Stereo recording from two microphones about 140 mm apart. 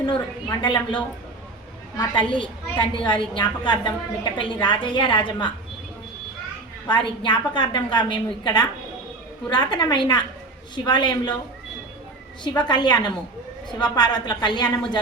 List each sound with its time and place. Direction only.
0.6 s a woman's voice: 35° left (ahead or behind)
6.8 s a woman's voice: 35° left (ahead or behind)
12.4 s a woman's voice: 30° left (ahead or behind)